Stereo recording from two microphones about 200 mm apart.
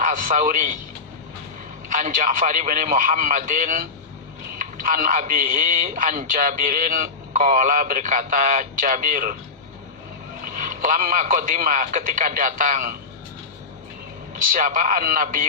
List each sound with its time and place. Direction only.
0.0 s a man's voice: 45° right (ahead or behind)
1.9 s a man's voice: 40° right (ahead or behind)
4.9 s a man's voice: 40° right (ahead or behind)
10.6 s a man's voice: 40° right (ahead or behind)
14.5 s speech: 40° right (ahead or behind)